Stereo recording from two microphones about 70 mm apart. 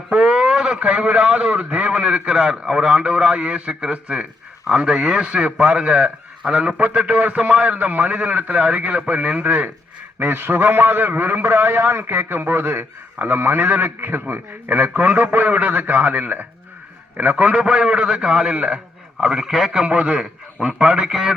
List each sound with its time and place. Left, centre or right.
0.1 s a man's voice: centre
19.2 s a man's voice: centre
19.8 s a man's voice: centre